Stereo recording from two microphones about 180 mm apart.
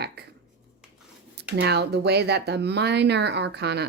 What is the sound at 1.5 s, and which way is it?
Speech, 65° right (ahead or behind).